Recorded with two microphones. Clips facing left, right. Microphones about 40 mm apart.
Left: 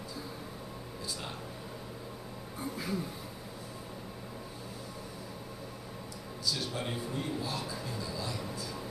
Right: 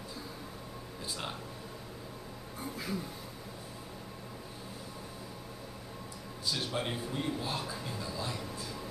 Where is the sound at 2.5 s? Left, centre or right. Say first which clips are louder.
Left 2 dB; centre.